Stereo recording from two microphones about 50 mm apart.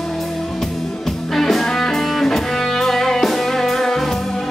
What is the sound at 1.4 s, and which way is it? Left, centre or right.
Music, centre.